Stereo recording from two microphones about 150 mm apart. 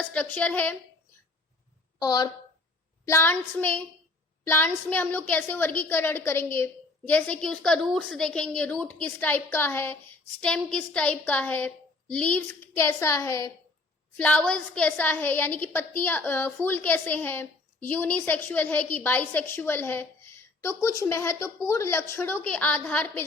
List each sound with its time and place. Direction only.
0.0 s a woman's voice: 10° left (ahead or behind)
2.0 s speech: 25° left (ahead or behind)
3.1 s a woman's voice: 15° left (ahead or behind)
14.2 s a woman's voice: 10° left (ahead or behind)